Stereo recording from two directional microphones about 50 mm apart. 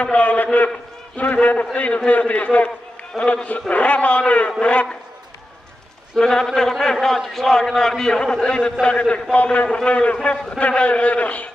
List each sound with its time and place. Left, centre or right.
0.0 s a man's voice: left
3.2 s a man's voice: centre
3.7 s a man's voice: left
6.1 s a man's voice: centre